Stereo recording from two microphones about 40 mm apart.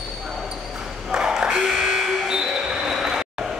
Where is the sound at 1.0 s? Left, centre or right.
Centre.